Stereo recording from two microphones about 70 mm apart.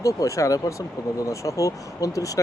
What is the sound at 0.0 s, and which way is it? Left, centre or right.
Speech, left.